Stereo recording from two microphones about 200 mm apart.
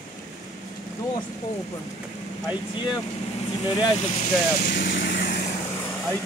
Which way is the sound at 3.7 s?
25° left (ahead or behind).